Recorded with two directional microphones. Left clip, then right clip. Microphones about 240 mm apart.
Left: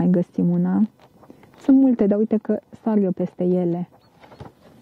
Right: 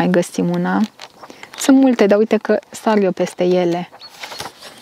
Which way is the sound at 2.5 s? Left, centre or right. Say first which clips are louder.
Right 8 dB; centre.